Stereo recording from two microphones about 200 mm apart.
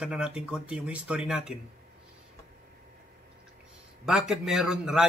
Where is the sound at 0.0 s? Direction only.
5° right (ahead or behind).